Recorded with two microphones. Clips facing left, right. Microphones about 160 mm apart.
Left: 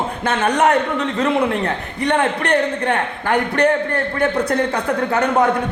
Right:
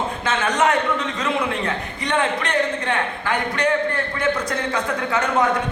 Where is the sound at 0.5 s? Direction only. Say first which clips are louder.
Left 2 dB; 60° left (ahead or behind).